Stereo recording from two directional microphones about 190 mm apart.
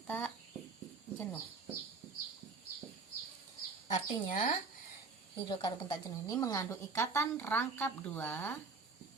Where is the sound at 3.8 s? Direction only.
40° left (ahead or behind).